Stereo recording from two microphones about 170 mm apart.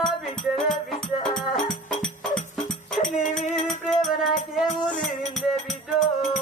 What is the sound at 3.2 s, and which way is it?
Music, 45° left (ahead or behind).